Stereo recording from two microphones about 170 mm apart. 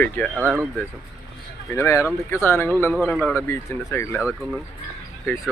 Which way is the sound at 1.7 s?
15° left (ahead or behind).